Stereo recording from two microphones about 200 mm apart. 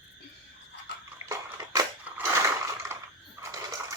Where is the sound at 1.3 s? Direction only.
15° right (ahead or behind).